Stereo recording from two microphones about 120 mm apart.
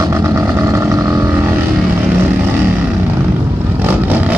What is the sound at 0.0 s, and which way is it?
Vehicle, 25° right (ahead or behind).